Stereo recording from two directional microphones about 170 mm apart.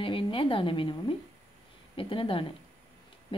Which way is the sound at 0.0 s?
30° left (ahead or behind).